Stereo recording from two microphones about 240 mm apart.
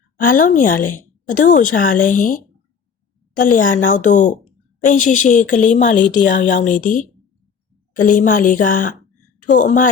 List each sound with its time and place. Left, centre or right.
0.2 s a woman's voice: left